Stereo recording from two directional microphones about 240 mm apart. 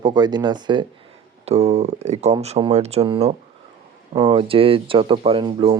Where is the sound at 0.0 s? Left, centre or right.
Centre.